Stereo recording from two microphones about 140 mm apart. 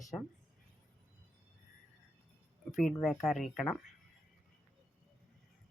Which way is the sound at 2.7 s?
Centre (ahead or behind).